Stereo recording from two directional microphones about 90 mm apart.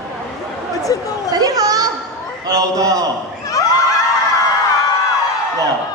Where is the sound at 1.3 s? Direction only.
45° right (ahead or behind).